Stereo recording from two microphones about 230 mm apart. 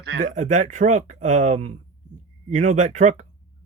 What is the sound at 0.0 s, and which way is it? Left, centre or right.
Speech, right.